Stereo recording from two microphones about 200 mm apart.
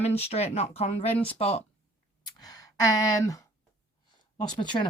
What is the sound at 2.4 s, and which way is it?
Speech, 20° left (ahead or behind).